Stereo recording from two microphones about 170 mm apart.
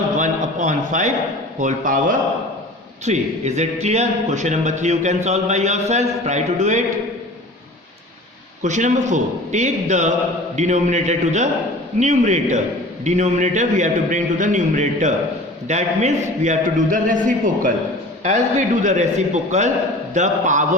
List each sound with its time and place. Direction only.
0.2 s a sound: 45° right (ahead or behind)
1.5 s a man's voice: 50° right (ahead or behind)
8.6 s a man's voice: 45° right (ahead or behind)